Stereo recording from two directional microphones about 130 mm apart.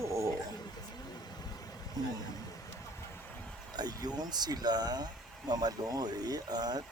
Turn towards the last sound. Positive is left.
turn(degrees=-30)  # may be behind; listen again after turning